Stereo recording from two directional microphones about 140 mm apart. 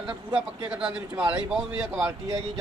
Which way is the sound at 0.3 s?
5° right (ahead or behind).